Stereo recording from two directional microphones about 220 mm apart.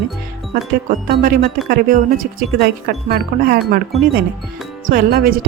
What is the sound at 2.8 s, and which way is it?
Speech, 45° right (ahead or behind).